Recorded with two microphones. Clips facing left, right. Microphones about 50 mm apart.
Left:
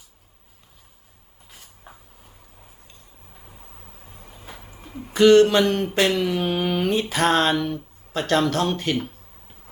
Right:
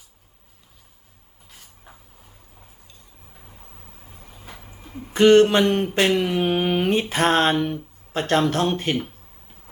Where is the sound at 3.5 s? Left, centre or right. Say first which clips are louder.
Left 1 dB; centre.